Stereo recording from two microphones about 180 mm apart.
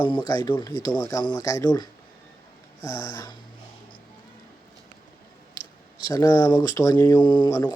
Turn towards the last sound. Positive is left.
turn(degrees=20)  # may be behind; listen again after turning